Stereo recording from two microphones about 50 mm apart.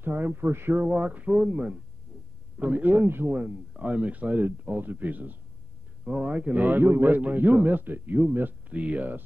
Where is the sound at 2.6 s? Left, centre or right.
Right.